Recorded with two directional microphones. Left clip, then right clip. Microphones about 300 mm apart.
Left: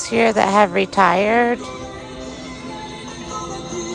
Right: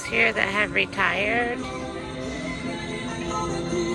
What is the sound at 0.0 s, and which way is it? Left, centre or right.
A woman's voice, centre.